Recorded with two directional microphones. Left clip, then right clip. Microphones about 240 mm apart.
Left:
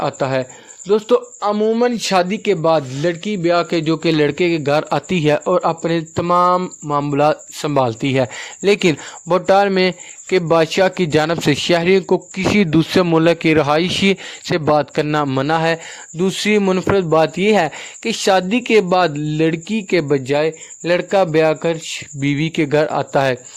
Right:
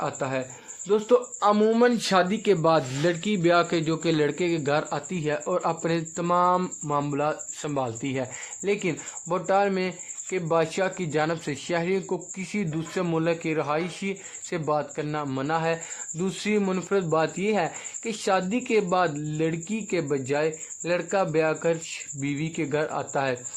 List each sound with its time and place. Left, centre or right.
0.0 s speech: left
1.4 s speech: centre
2.0 s speech: left
7.2 s speech: left